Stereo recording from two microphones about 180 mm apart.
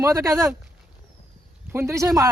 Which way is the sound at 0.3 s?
15° right (ahead or behind).